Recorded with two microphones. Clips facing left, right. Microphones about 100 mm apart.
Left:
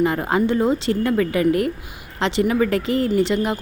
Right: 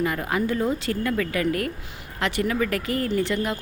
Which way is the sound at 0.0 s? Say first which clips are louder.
Left 6 dB; 25° left (ahead or behind).